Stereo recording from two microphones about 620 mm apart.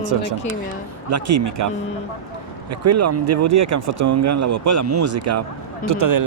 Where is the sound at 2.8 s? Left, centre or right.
Right.